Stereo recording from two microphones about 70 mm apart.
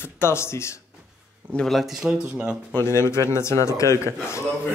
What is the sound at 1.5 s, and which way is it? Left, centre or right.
Speech, centre.